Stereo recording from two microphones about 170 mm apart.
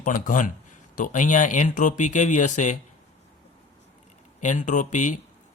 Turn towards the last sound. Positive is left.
turn(degrees=45)  # may be behind; listen again after turning